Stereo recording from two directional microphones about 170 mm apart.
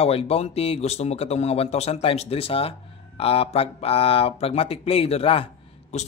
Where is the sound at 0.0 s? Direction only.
35° left (ahead or behind).